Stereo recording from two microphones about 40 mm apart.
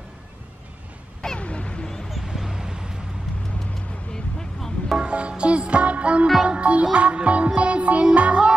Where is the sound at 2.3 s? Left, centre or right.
Centre.